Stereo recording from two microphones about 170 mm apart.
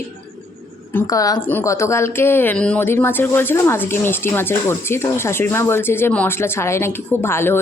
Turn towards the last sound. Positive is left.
turn(degrees=15)  # may be behind; listen again after turning